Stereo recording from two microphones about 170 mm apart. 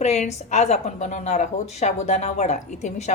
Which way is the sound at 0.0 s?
40° left (ahead or behind).